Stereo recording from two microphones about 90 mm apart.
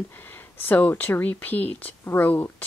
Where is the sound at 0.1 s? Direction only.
25° left (ahead or behind).